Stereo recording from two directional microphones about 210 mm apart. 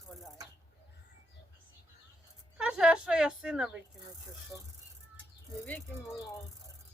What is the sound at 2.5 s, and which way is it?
Speech, 5° right (ahead or behind).